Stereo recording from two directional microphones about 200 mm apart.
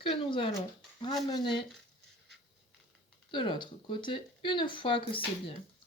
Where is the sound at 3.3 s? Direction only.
25° left (ahead or behind).